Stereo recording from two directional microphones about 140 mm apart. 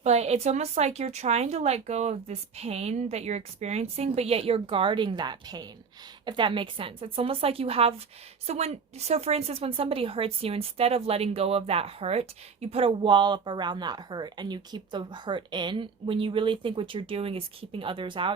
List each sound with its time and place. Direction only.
0.0 s a woman's voice: 50° right (ahead or behind)